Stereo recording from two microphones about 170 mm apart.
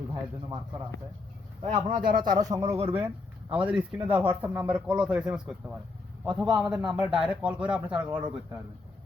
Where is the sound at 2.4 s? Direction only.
20° right (ahead or behind).